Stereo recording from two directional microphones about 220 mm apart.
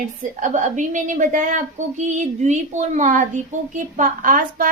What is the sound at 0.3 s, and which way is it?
A woman's voice, 35° right (ahead or behind).